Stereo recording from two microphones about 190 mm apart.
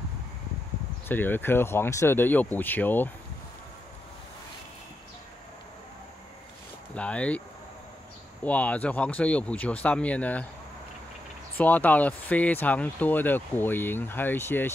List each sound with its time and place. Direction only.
1.0 s speech: 10° left (ahead or behind)
6.9 s speech: 5° left (ahead or behind)
8.5 s speech: 5° left (ahead or behind)
11.5 s speech: 10° left (ahead or behind)